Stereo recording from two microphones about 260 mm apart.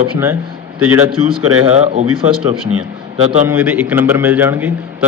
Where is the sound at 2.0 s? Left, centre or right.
Right.